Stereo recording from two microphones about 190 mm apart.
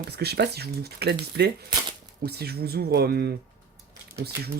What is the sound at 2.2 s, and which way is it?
Speech, 55° right (ahead or behind).